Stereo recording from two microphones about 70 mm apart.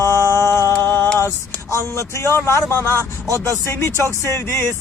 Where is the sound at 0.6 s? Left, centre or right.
Right.